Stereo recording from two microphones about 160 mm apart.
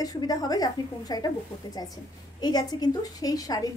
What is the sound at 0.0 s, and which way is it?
A woman's voice, 25° left (ahead or behind).